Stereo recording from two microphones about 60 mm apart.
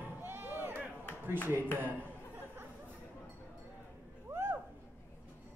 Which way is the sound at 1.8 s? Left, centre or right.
Right.